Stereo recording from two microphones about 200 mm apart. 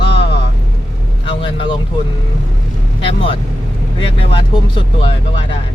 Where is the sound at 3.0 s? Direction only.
25° left (ahead or behind).